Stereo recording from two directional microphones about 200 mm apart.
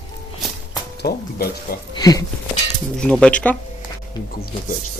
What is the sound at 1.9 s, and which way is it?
Speech, 20° left (ahead or behind).